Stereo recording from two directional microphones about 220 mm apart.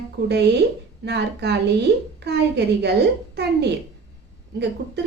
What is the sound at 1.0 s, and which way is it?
A woman's voice, 50° right (ahead or behind).